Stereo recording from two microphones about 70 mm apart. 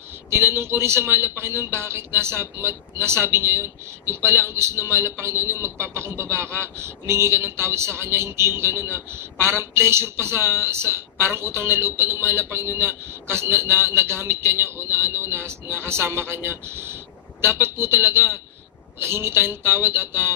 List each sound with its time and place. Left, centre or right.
0.3 s a man's voice: right